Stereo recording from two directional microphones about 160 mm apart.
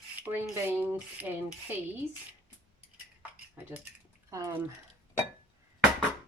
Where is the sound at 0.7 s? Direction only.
15° right (ahead or behind).